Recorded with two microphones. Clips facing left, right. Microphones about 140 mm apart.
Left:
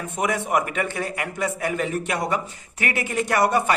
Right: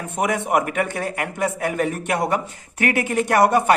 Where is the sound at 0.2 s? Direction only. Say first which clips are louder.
Right 3 dB; 55° right (ahead or behind).